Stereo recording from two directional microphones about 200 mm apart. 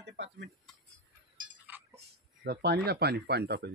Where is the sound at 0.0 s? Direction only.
60° right (ahead or behind).